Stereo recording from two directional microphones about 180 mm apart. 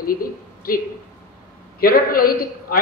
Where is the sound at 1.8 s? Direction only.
55° left (ahead or behind).